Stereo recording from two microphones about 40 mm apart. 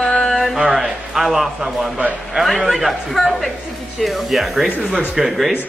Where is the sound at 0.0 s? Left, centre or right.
Left.